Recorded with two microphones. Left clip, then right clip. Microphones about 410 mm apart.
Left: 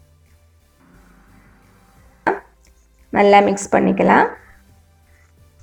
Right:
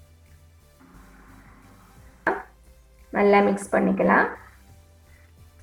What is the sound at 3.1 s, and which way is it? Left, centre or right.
A woman's voice, centre.